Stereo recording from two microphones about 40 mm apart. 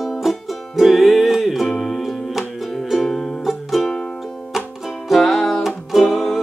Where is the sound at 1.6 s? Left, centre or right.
Centre.